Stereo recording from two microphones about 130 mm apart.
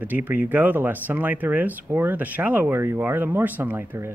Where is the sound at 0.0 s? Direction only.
15° right (ahead or behind).